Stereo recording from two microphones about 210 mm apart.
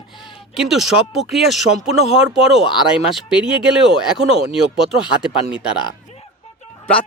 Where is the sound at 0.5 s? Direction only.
Centre (ahead or behind).